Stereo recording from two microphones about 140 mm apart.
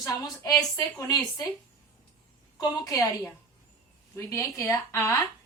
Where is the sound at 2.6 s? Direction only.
25° left (ahead or behind).